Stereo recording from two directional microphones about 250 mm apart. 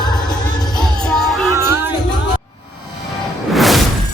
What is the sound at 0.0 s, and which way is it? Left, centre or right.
Music, centre.